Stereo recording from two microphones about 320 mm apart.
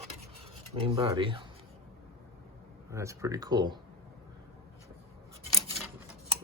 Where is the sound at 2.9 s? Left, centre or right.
Centre.